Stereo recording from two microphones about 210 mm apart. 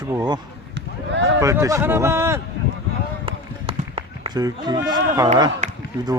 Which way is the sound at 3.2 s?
25° right (ahead or behind).